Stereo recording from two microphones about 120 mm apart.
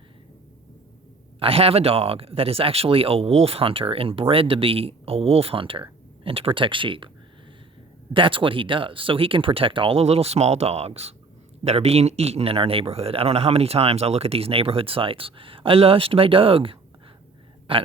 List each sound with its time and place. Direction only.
1.4 s a man's voice: 50° right (ahead or behind)
8.1 s a man's voice: 45° right (ahead or behind)